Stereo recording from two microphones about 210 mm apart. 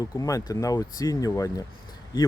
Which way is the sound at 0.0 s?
15° left (ahead or behind).